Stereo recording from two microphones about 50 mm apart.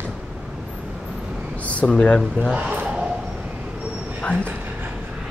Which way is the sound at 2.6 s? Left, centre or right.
Right.